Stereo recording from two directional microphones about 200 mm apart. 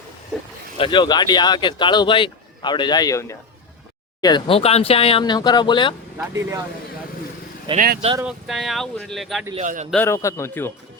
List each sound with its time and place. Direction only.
0.8 s speech: 25° left (ahead or behind)
6.1 s speech: 10° right (ahead or behind)
7.7 s speech: 25° right (ahead or behind)
8.2 s speech: 5° right (ahead or behind)
9.6 s speech: 35° right (ahead or behind)
9.9 s a man's voice: 10° left (ahead or behind)